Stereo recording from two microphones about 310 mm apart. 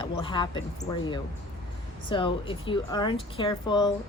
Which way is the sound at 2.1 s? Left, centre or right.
Centre.